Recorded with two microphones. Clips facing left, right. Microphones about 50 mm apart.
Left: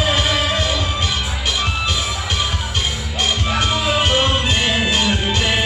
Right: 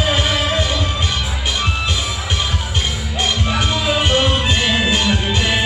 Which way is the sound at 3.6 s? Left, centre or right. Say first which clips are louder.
Left 1 dB; centre.